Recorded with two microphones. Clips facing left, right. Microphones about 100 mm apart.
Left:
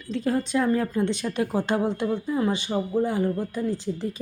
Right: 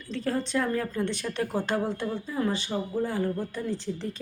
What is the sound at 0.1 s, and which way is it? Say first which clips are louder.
Speech: left 4 dB; 15° left (ahead or behind).